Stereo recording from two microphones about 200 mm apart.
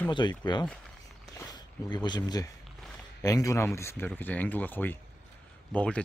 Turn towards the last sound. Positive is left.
turn(degrees=5)  # may be behind; listen again after turning